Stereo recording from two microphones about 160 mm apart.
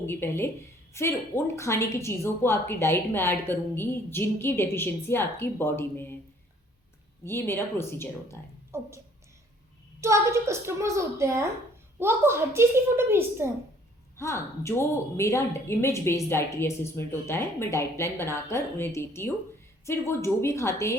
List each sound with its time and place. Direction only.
0.0 s a woman's voice: 15° left (ahead or behind)
7.3 s a woman's voice: 15° left (ahead or behind)
8.7 s a woman's voice: 15° right (ahead or behind)
10.0 s a woman's voice: 20° right (ahead or behind)
14.2 s a woman's voice: 15° left (ahead or behind)